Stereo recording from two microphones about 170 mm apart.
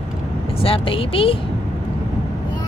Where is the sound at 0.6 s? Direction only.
35° left (ahead or behind).